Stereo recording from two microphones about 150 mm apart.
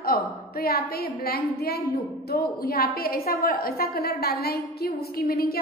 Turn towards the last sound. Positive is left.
turn(degrees=85)